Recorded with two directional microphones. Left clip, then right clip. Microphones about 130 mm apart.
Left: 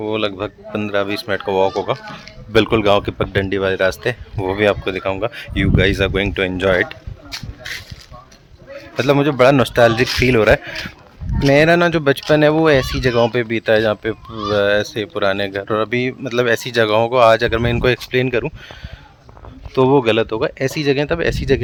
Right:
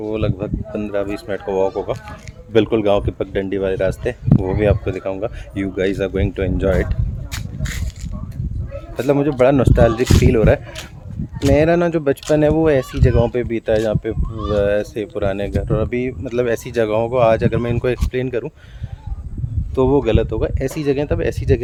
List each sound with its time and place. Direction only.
0.0 s a man's voice: 10° right (ahead or behind)
9.0 s a man's voice: 10° right (ahead or behind)
18.1 s speech: 15° left (ahead or behind)
19.7 s a man's voice: 10° left (ahead or behind)